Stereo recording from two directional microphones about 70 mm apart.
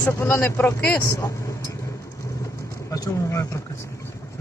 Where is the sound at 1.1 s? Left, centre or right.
Left.